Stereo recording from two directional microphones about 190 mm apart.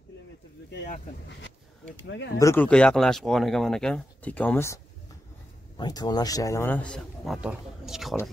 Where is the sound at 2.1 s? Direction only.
70° left (ahead or behind).